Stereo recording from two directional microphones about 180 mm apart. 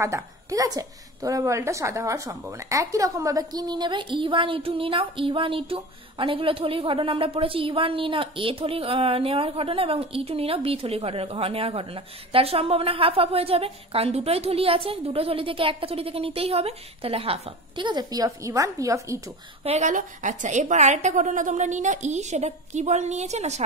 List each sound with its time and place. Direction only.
0.0 s a woman's voice: 15° right (ahead or behind)
19.6 s a woman's voice: 40° right (ahead or behind)